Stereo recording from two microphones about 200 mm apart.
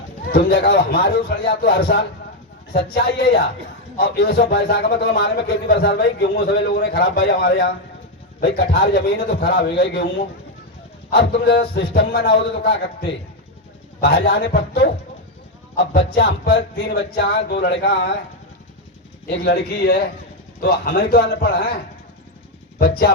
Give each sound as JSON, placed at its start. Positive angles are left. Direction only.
{"t": 0.3, "sound": "a man's voice", "side_deg": 55}
{"t": 11.1, "sound": "a man's voice", "side_deg": 55}
{"t": 14.0, "sound": "a man's voice", "side_deg": 55}
{"t": 19.3, "sound": "a man's voice", "side_deg": 55}